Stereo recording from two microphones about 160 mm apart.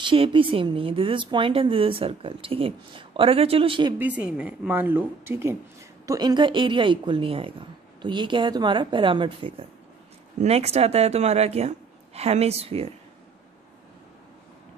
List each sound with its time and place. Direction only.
0.0 s speech: 30° right (ahead or behind)
4.0 s a woman's voice: 10° right (ahead or behind); by 12.9 s 40° right (ahead or behind)